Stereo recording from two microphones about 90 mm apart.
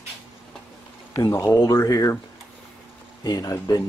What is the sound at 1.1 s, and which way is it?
Speech, 40° left (ahead or behind).